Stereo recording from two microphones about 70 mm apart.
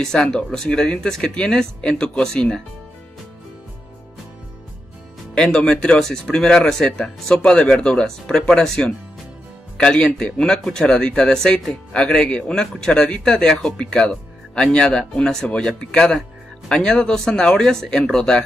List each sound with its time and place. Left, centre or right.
0.0 s speech: centre
5.3 s speech: centre